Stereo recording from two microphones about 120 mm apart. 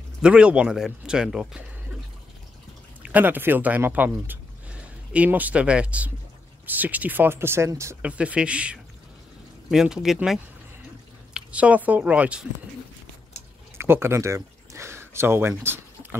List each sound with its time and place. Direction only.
0.2 s speech: 10° right (ahead or behind)
3.0 s speech: 15° right (ahead or behind)
8.0 s speech: 10° right (ahead or behind)
13.7 s a sound: 20° right (ahead or behind)